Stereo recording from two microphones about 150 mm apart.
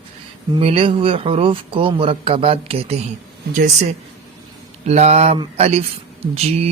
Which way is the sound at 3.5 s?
55° right (ahead or behind).